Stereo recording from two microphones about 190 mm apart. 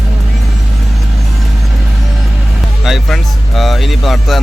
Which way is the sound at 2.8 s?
Centre (ahead or behind).